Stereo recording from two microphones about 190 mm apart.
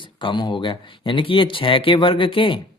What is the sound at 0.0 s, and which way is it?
Speech, 25° left (ahead or behind).